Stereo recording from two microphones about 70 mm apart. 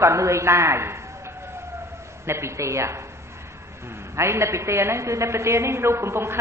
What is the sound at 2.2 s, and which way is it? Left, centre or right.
Speech, right.